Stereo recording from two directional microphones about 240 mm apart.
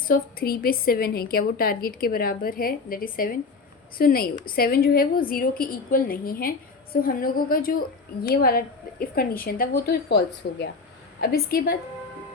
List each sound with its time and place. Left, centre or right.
0.0 s a woman's voice: left